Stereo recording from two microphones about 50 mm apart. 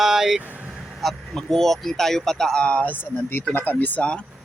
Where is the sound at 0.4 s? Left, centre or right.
Right.